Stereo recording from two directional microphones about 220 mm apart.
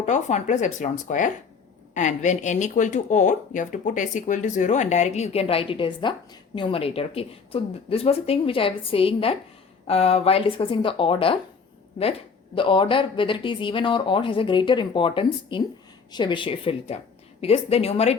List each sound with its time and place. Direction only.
0.0 s speech: 30° left (ahead or behind)
12.5 s speech: 20° left (ahead or behind)